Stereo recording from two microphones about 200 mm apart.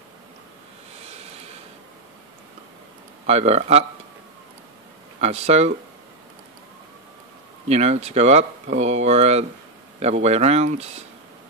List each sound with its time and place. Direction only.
1.0 s vehicle: 30° right (ahead or behind)
3.3 s speech: 30° right (ahead or behind)
5.2 s speech: 35° right (ahead or behind)
7.6 s speech: 35° right (ahead or behind)